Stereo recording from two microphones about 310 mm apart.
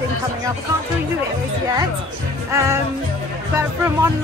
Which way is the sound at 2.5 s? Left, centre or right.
Centre.